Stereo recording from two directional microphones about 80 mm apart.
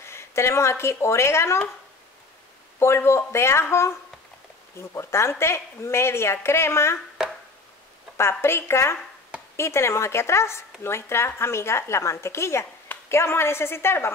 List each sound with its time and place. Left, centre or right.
0.0 s speech: left
2.8 s speech: left
4.9 s speech: left
8.2 s speech: left